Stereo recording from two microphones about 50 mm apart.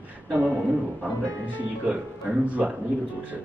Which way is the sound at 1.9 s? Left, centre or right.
Right.